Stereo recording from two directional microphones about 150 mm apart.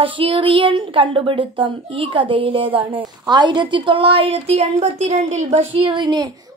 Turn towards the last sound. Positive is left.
turn(degrees=-30)  # may be behind; listen again after turning